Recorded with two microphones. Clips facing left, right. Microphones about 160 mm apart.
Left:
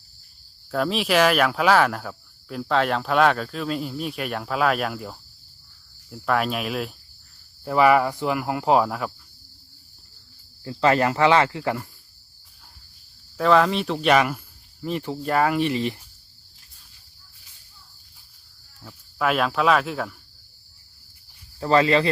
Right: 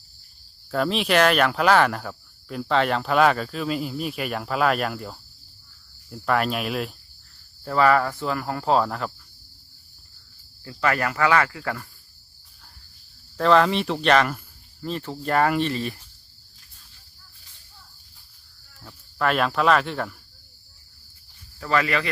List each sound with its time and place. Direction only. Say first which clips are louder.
0.7 s speech: even; centre (ahead or behind)
7.6 s speech: left 2 dB; 15° left (ahead or behind)
10.6 s speech: left 5 dB; 25° left (ahead or behind)
13.3 s speech: even; 5° left (ahead or behind)
15.3 s speech: even; 5° left (ahead or behind); by 16.0 s 20° left (ahead or behind)
18.8 s speech: even; 5° left (ahead or behind)
21.6 s speech: left 5 dB; 30° left (ahead or behind)